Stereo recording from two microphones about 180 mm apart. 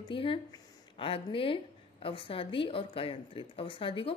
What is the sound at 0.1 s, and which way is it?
Speech, 30° left (ahead or behind).